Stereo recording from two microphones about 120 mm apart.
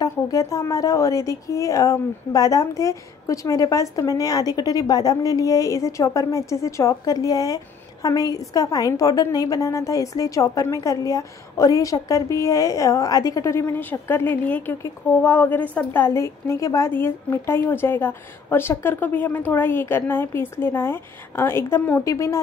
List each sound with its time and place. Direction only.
0.0 s a woman's voice: 30° left (ahead or behind)
22.0 s a woman's voice: 25° left (ahead or behind)